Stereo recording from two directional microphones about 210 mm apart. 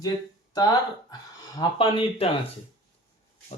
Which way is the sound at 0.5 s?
20° left (ahead or behind).